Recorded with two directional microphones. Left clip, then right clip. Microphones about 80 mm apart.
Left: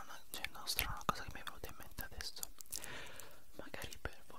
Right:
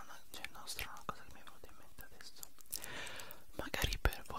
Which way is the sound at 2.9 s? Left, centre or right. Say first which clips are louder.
Right 4 dB; centre.